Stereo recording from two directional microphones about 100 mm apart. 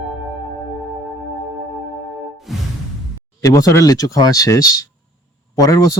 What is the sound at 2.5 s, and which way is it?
Music, centre (ahead or behind).